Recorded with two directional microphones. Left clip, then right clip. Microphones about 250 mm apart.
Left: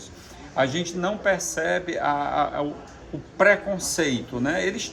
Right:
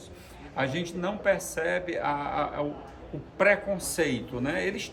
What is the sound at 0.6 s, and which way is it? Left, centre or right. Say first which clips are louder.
A man's voice: left 6 dB; centre.